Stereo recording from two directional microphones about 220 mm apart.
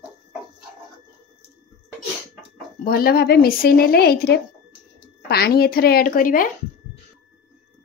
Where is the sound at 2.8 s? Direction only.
45° left (ahead or behind).